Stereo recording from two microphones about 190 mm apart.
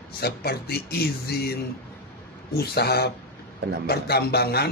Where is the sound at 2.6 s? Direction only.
55° left (ahead or behind).